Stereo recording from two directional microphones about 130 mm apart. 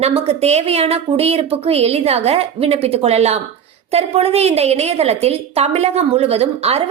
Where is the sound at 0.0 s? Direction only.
55° right (ahead or behind).